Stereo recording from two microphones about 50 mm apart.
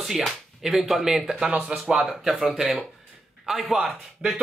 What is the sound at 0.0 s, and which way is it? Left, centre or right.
Speech, centre.